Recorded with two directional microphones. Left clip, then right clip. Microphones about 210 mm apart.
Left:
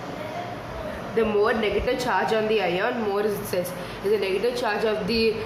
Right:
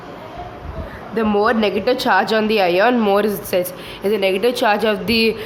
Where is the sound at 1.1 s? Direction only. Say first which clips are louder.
Right 5 dB; 40° right (ahead or behind).